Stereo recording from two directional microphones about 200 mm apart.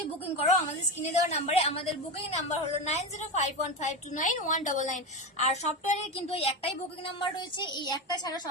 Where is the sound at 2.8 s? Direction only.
35° left (ahead or behind).